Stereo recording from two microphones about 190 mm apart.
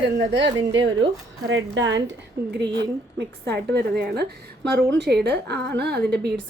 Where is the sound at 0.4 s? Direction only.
25° right (ahead or behind).